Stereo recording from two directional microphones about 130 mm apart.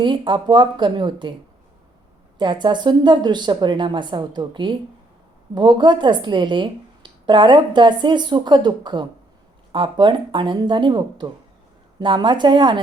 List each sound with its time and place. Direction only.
0.0 s speech: 40° right (ahead or behind)
2.4 s speech: 35° right (ahead or behind)